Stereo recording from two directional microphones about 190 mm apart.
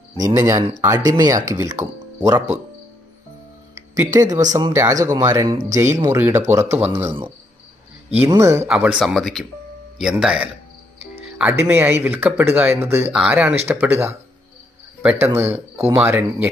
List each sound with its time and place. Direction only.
0.2 s speech: 15° right (ahead or behind)
3.7 s speech: 15° right (ahead or behind)
8.3 s speech: 15° right (ahead or behind)
8.6 s speech: 5° right (ahead or behind)
11.5 s speech: 10° right (ahead or behind)
15.0 s speech: 10° right (ahead or behind)